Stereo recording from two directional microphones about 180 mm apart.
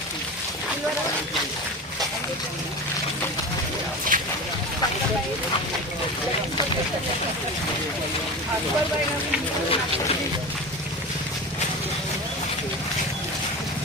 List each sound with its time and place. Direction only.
4.1 s boat: 50° right (ahead or behind)